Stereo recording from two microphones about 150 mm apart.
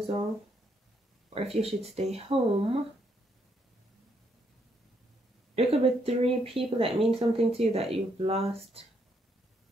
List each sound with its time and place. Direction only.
1.3 s speech: 45° right (ahead or behind)
5.6 s speech: 40° right (ahead or behind)